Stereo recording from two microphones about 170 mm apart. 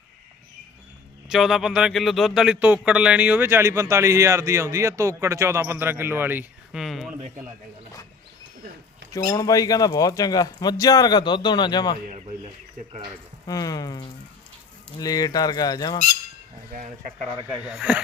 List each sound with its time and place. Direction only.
1.3 s speech: centre (ahead or behind)
6.8 s speech: centre (ahead or behind)
9.1 s speech: 20° left (ahead or behind)
13.5 s speech: 20° left (ahead or behind)
16.7 s speech: 50° right (ahead or behind)
17.6 s speech: 5° right (ahead or behind)